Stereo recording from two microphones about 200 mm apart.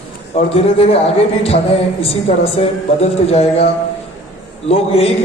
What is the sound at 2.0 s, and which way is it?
A man's voice, 30° left (ahead or behind).